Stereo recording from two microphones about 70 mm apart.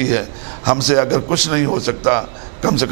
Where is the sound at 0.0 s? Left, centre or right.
Centre.